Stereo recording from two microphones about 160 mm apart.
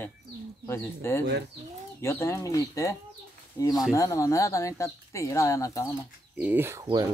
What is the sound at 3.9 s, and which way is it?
Speech, 20° left (ahead or behind).